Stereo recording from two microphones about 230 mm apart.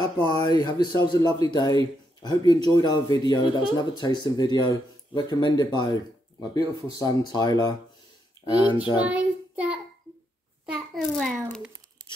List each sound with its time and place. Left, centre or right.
0.0 s speech: centre
9.0 s child singing: centre
10.6 s a sound: centre